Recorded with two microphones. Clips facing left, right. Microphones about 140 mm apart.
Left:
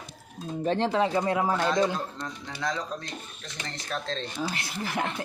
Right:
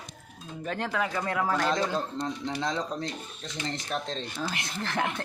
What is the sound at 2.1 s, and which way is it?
Speech, 25° right (ahead or behind).